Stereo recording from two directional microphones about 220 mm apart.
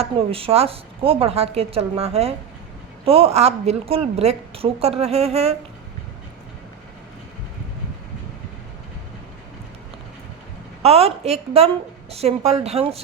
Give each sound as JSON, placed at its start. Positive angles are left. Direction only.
{"t": 0.0, "sound": "a woman's voice", "side_deg": -25}
{"t": 10.8, "sound": "a woman's voice", "side_deg": -25}